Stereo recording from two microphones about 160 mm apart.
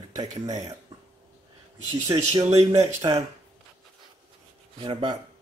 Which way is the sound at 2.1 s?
20° right (ahead or behind).